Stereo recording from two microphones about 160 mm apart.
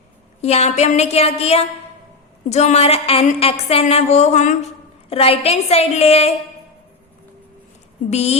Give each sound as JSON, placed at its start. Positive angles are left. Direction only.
{"t": 0.4, "sound": "a woman's voice", "side_deg": 40}
{"t": 8.1, "sound": "a woman's voice", "side_deg": 40}